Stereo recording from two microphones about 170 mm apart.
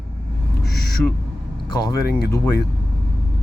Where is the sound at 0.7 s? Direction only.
65° left (ahead or behind).